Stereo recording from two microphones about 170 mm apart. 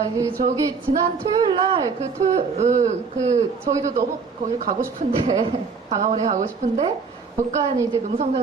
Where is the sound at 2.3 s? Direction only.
45° right (ahead or behind).